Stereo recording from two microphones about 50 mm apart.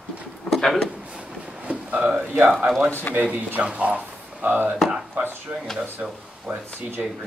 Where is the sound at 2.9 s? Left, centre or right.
Left.